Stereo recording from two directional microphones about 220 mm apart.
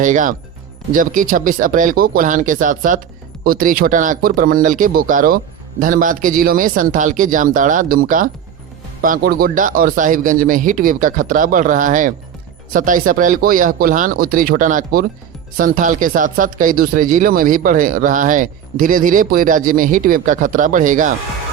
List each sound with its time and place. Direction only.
0.0 s speech: 35° right (ahead or behind)